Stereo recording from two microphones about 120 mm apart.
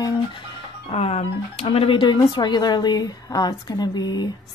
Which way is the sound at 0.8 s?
55° left (ahead or behind).